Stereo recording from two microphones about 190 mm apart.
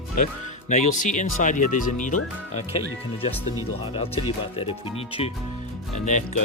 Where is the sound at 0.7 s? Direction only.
40° left (ahead or behind).